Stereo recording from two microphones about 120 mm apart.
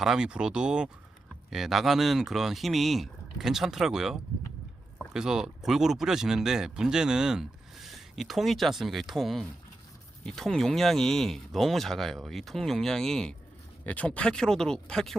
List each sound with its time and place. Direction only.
0.0 s speech: 5° right (ahead or behind)